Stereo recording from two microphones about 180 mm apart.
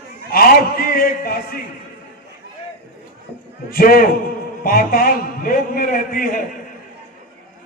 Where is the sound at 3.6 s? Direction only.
55° left (ahead or behind).